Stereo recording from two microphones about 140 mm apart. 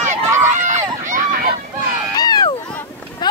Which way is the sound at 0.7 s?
60° right (ahead or behind).